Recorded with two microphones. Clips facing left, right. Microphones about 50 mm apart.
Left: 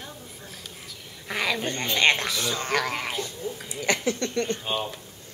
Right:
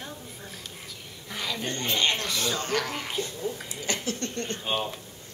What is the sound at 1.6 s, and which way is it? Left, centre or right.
A woman's voice, left.